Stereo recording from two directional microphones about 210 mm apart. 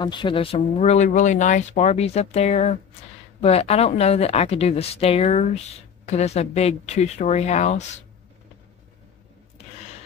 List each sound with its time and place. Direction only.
0.0 s speech: 20° left (ahead or behind)